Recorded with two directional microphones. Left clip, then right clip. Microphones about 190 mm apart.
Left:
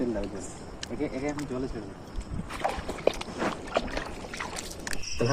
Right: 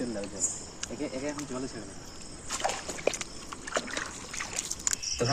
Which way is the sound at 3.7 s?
Centre (ahead or behind).